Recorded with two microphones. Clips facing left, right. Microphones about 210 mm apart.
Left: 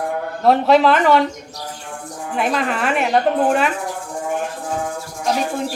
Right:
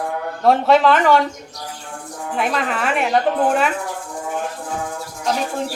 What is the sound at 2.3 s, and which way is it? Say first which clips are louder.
Speech: left 1 dB; centre (ahead or behind).